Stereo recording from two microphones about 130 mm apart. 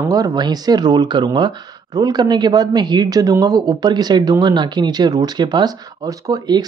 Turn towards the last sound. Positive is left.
turn(degrees=-30)  # may be behind; listen again after turning